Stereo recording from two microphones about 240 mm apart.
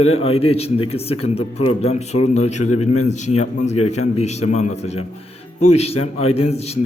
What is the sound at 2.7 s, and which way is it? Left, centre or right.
Speech, left.